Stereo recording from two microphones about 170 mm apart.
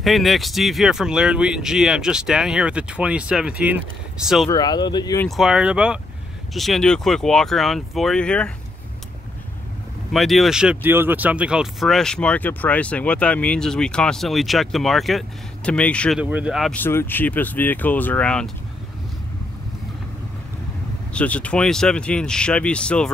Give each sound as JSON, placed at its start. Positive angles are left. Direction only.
{"t": 0.0, "sound": "speech", "side_deg": 0}
{"t": 4.5, "sound": "speech", "side_deg": 25}
{"t": 5.2, "sound": "speech", "side_deg": 0}
{"t": 10.1, "sound": "speech", "side_deg": 0}
{"t": 16.2, "sound": "speech", "side_deg": -5}
{"t": 16.7, "sound": "speech", "side_deg": 10}
{"t": 21.1, "sound": "speech", "side_deg": 5}